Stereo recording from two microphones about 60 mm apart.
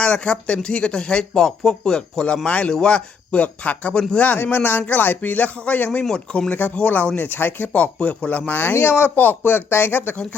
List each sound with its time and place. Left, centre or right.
0.0 s a man's voice: centre; by 6.7 s left
6.7 s a man's voice: centre
7.2 s a man's voice: left